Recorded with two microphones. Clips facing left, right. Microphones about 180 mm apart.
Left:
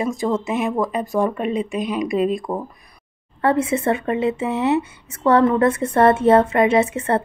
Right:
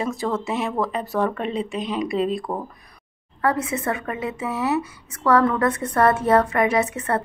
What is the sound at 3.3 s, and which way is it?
Speech, 30° left (ahead or behind).